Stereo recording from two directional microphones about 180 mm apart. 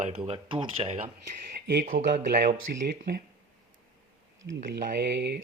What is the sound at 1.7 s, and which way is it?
Speech, 50° right (ahead or behind).